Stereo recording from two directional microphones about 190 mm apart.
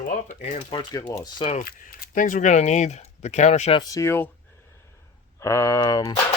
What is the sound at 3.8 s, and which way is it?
Speech, 15° left (ahead or behind).